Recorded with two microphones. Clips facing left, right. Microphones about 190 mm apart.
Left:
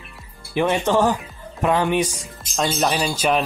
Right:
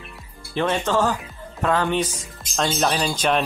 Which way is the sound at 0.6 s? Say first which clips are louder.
Left 3 dB; 15° left (ahead or behind).